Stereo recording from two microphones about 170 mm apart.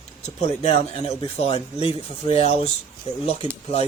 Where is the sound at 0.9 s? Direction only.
35° left (ahead or behind).